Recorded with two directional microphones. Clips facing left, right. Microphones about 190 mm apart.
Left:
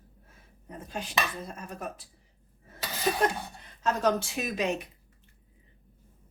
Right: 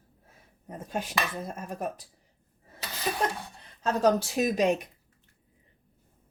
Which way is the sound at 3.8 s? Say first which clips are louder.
Right 3 dB; 35° right (ahead or behind).